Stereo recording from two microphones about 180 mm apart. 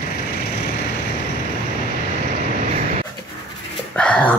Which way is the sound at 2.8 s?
50° right (ahead or behind).